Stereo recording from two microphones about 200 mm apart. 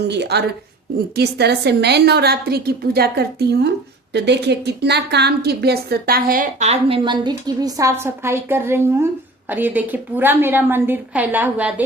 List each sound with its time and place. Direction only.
0.1 s a woman's voice: 55° right (ahead or behind); by 11.7 s 10° right (ahead or behind)